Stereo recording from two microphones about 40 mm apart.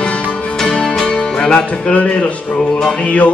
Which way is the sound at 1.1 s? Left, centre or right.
Left.